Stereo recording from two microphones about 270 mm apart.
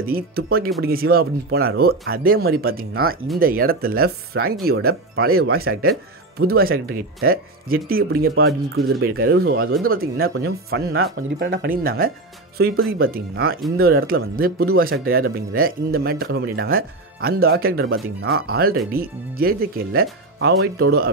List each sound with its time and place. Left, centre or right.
0.0 s speech: right
9.4 s speech: right
10.4 s speech: right
11.7 s speech: right